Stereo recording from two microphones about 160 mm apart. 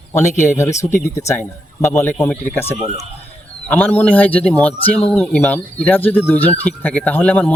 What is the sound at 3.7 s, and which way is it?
Speech, 10° left (ahead or behind).